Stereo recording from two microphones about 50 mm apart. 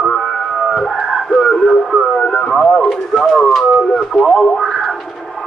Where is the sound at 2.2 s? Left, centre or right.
Centre.